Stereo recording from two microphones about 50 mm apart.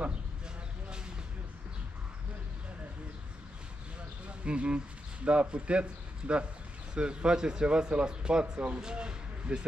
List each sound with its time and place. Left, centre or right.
4.5 s a man's voice: right